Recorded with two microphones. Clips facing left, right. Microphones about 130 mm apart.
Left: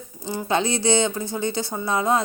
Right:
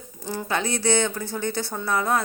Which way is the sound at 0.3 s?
20° left (ahead or behind).